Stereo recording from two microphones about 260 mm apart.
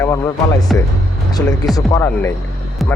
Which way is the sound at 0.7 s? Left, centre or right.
Centre.